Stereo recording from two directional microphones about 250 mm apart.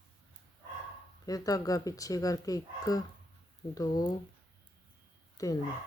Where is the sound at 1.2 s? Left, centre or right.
Centre.